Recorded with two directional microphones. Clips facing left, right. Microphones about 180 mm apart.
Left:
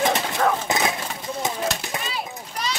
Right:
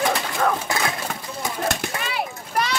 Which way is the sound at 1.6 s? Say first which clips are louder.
Right 2 dB; 60° right (ahead or behind).